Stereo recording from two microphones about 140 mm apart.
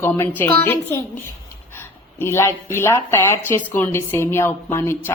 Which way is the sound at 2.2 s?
20° left (ahead or behind).